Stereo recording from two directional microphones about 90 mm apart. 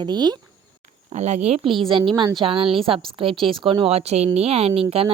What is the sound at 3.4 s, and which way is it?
Speech, 70° right (ahead or behind).